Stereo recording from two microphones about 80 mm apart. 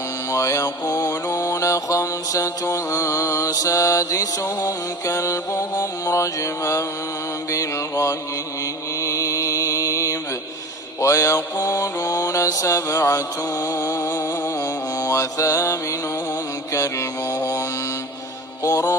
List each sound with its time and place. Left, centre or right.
0.3 s mantra: left
1.4 s mantra: left